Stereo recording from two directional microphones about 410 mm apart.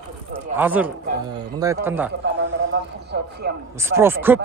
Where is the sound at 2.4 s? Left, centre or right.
Right.